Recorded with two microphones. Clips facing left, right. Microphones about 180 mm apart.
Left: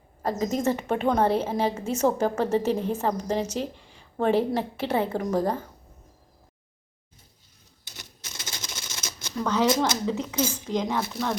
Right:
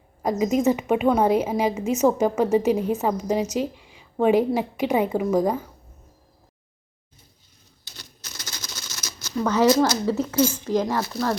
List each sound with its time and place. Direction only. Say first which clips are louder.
0.2 s a woman's voice: right 5 dB; 10° right (ahead or behind)
7.9 s typewriter: even; 25° left (ahead or behind)
9.4 s speech: right 5 dB; 5° right (ahead or behind)